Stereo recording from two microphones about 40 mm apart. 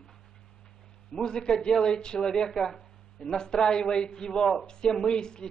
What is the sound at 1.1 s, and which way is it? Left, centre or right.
Speech, centre.